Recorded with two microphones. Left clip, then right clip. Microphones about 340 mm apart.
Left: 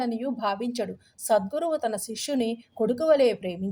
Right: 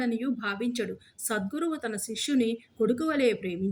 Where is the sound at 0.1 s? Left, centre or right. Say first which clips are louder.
Left 3 dB; left.